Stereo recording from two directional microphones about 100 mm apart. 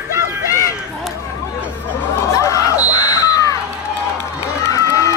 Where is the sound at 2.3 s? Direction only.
35° left (ahead or behind).